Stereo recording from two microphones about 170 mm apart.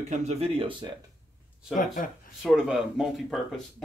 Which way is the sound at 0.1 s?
40° right (ahead or behind).